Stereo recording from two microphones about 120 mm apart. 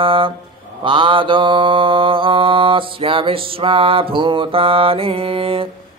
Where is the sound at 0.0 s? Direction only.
45° right (ahead or behind).